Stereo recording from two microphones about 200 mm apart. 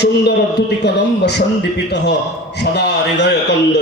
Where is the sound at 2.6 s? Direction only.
60° left (ahead or behind).